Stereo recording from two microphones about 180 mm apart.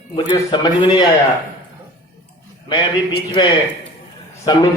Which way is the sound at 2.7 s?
25° left (ahead or behind).